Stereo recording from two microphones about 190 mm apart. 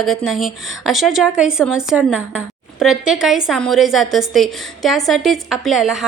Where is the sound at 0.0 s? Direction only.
Centre (ahead or behind).